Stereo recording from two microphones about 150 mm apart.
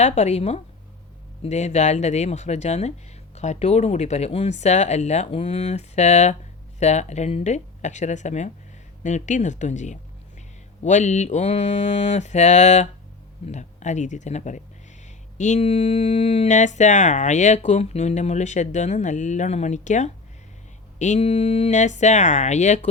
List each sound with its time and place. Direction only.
0.0 s speech: 50° left (ahead or behind)